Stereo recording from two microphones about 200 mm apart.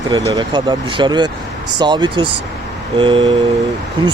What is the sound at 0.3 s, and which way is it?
Speech, 20° right (ahead or behind).